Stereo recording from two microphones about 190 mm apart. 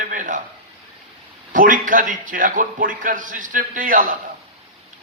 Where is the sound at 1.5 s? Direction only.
45° right (ahead or behind).